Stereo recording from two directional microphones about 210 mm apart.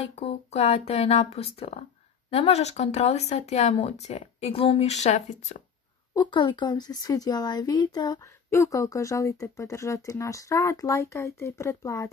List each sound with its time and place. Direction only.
0.0 s speech: 30° left (ahead or behind)
6.1 s speech: 20° left (ahead or behind)